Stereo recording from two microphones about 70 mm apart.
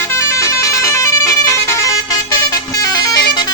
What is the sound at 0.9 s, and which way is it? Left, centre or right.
Music, left.